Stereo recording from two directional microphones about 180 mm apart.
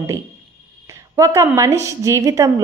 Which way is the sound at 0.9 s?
15° right (ahead or behind).